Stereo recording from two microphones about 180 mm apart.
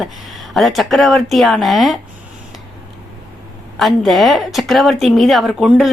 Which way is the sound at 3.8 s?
Centre (ahead or behind).